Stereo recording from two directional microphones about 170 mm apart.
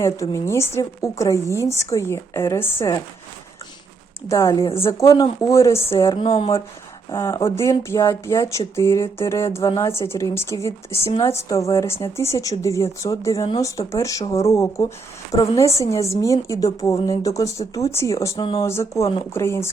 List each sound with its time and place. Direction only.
0.0 s a woman's voice: 15° left (ahead or behind)
4.3 s speech: 20° left (ahead or behind)
6.0 s speech: 30° left (ahead or behind)
7.1 s a woman's voice: 20° left (ahead or behind)
10.7 s speech: 35° left (ahead or behind)
11.2 s a woman's voice: 20° left (ahead or behind)